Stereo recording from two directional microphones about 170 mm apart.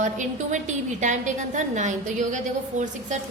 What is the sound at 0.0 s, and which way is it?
A woman's voice, 45° right (ahead or behind).